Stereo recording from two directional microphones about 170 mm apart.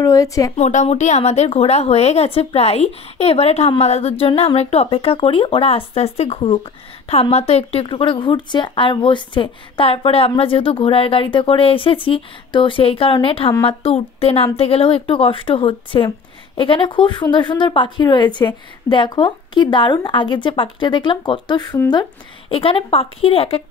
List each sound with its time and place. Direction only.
0.0 s a woman's voice: 20° left (ahead or behind)
0.6 s a woman's voice: 45° left (ahead or behind)